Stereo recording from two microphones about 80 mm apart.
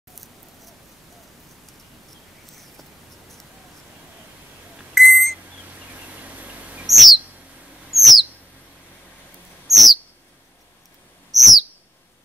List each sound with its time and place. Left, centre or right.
0.1 s scissors: centre
2.5 s a sound: centre
4.9 s beep: centre
6.2 s a sound: centre
6.9 s chirp: centre
7.9 s bird: centre
9.7 s bird: centre
11.3 s bird: centre